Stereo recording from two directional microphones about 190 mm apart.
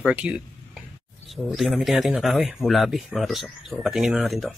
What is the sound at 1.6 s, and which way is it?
Speech, centre (ahead or behind).